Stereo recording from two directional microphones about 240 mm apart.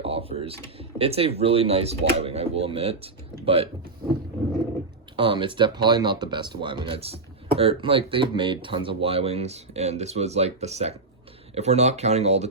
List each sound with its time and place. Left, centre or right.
0.0 s a sound: right
0.8 s speech: right
5.1 s speech: right